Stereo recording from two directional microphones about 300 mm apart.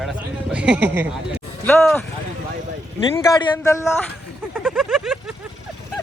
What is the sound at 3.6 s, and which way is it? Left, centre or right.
Speech, centre.